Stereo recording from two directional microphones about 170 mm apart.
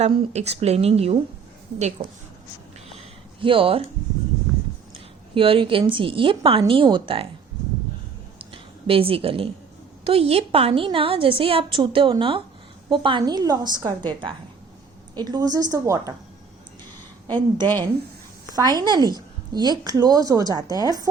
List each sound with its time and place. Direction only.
0.0 s a woman's voice: 40° right (ahead or behind)
3.4 s a woman's voice: 30° right (ahead or behind)
5.3 s a woman's voice: 30° right (ahead or behind)
8.4 s a sound: 30° right (ahead or behind)
10.0 s a woman's voice: 35° right (ahead or behind)
17.2 s a woman's voice: 25° right (ahead or behind)